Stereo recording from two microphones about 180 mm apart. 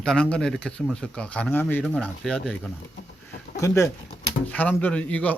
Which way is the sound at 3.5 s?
15° left (ahead or behind).